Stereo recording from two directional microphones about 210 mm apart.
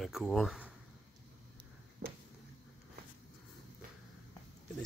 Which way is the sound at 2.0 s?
40° right (ahead or behind).